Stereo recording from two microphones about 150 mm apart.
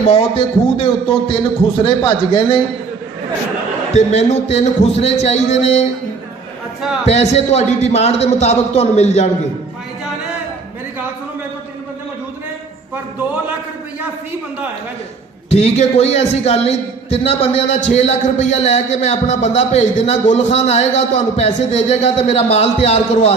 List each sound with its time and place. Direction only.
0.1 s a man's voice: 40° left (ahead or behind)
3.9 s a man's voice: 45° left (ahead or behind)
7.0 s a man's voice: 45° left (ahead or behind)
15.4 s a man's voice: 45° left (ahead or behind)
17.7 s a man's voice: 50° left (ahead or behind)